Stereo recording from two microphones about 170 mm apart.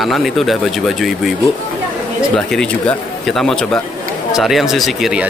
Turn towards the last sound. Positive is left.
turn(degrees=-5)  # may be behind; listen again after turning